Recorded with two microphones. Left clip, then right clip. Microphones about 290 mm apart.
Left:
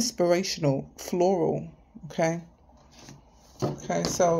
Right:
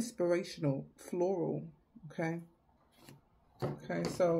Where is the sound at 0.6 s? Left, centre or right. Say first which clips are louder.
Left 10 dB; left.